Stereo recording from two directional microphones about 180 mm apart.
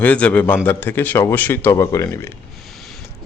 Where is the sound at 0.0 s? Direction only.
10° left (ahead or behind).